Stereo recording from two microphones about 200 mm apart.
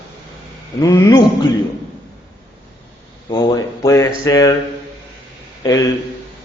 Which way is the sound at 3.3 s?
20° left (ahead or behind).